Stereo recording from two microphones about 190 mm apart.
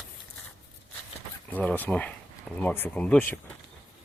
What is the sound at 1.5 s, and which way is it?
Speech, 10° left (ahead or behind).